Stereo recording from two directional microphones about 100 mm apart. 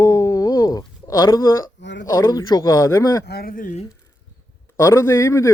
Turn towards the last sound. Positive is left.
turn(degrees=30)  # may be behind; listen again after turning